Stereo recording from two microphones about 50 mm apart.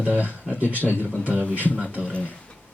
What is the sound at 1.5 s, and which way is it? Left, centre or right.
Speech, left.